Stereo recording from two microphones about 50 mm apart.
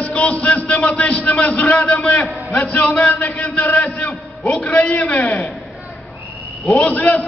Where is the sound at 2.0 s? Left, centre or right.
Left.